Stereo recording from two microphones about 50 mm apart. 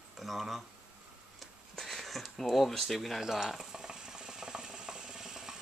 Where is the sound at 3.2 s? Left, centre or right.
Centre.